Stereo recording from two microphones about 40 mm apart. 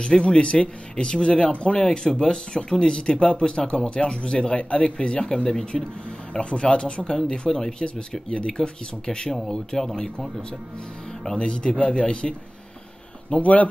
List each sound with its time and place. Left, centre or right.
0.0 s speech: left
6.5 s speech: left
7.1 s speech: centre
11.3 s speech: left
13.3 s speech: left